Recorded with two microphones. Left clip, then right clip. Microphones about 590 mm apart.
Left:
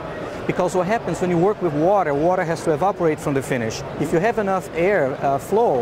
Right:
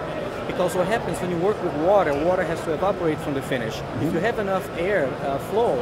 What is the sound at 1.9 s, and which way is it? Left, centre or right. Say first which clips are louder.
Speech: left 1 dB; left.